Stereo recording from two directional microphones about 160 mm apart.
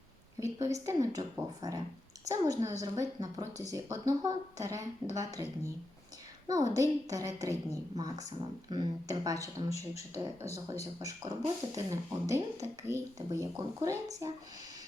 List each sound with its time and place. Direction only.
0.6 s speech: 20° right (ahead or behind)